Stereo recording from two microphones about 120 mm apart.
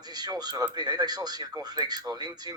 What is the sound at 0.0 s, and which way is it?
Speech, 35° right (ahead or behind).